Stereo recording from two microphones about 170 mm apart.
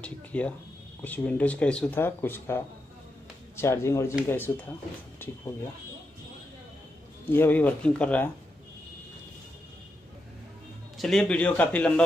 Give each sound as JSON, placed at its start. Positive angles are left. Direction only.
{"t": 0.0, "sound": "speech", "side_deg": 5}
{"t": 7.2, "sound": "speech", "side_deg": 10}
{"t": 11.0, "sound": "speech", "side_deg": 0}